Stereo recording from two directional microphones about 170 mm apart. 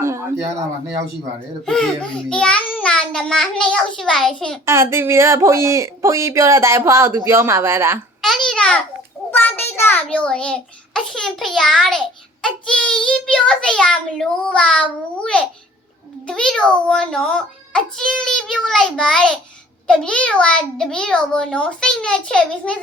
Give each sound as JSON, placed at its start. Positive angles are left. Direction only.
{"t": 0.0, "sound": "a sound", "side_deg": -15}
{"t": 1.6, "sound": "a child's voice", "side_deg": 5}
{"t": 4.6, "sound": "speech", "side_deg": -15}
{"t": 8.2, "sound": "babbling", "side_deg": 0}
{"t": 9.4, "sound": "a child's voice", "side_deg": 10}